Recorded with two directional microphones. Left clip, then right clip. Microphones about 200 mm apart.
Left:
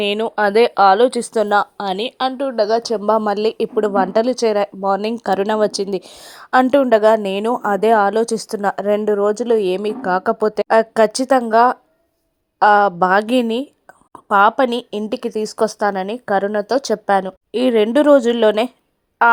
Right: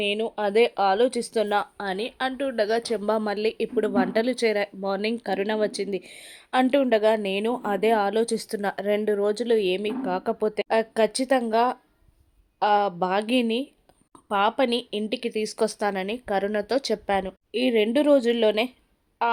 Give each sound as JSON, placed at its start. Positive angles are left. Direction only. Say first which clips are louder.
{"t": 0.0, "sound": "a woman's voice", "louder": "left 8 dB", "side_deg": 15}
{"t": 2.5, "sound": "a woman's voice", "louder": "left 7 dB", "side_deg": 15}